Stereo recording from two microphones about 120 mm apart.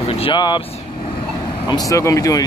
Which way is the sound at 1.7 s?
30° left (ahead or behind).